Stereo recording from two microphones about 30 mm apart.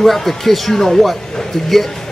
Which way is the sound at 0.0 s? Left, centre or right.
Centre.